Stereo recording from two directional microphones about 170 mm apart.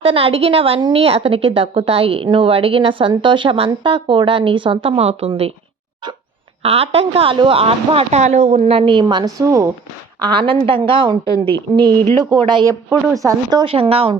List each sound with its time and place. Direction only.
0.0 s a woman's voice: 35° right (ahead or behind)
6.6 s a woman's voice: 35° right (ahead or behind)
12.5 s speech: 25° right (ahead or behind)
13.7 s a woman's voice: 35° right (ahead or behind)